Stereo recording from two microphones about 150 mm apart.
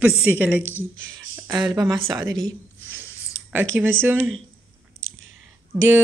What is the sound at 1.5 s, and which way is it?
Speech, 30° right (ahead or behind).